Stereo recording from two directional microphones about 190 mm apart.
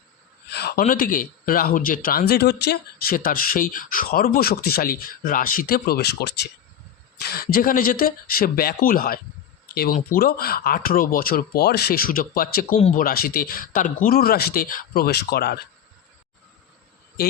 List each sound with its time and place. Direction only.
0.5 s speech: 55° left (ahead or behind)